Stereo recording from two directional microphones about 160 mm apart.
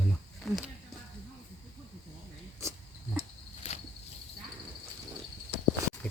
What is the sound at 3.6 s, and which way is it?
Cricket, 40° left (ahead or behind).